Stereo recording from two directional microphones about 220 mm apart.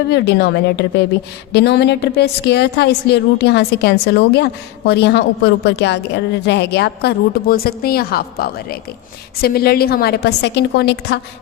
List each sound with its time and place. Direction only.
0.1 s a woman's voice: 50° left (ahead or behind)